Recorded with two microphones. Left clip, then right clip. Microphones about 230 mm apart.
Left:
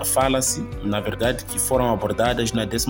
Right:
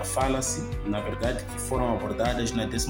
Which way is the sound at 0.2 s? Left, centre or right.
Left.